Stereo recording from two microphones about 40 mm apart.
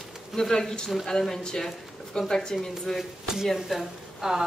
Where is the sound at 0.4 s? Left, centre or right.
Centre.